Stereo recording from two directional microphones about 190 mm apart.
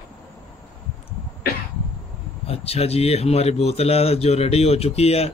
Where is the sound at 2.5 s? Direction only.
30° left (ahead or behind).